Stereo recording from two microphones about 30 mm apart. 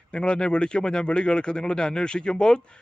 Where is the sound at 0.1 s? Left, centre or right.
Left.